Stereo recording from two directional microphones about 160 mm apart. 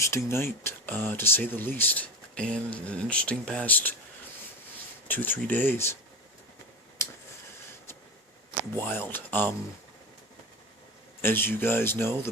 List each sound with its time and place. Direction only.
0.0 s speech: 15° left (ahead or behind)
5.0 s speech: 10° left (ahead or behind)
7.0 s a sound: 15° left (ahead or behind)
8.7 s speech: 15° left (ahead or behind)
11.2 s speech: 15° left (ahead or behind)